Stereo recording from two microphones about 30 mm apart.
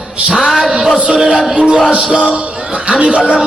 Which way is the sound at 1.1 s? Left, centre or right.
Centre.